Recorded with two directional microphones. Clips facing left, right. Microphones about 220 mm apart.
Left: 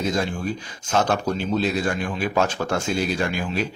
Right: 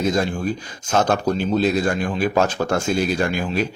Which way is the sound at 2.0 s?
40° right (ahead or behind).